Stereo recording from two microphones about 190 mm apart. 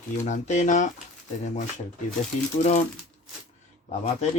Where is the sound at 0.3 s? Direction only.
40° left (ahead or behind).